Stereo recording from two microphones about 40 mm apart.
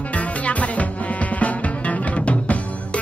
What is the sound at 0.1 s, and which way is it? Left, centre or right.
Music, left.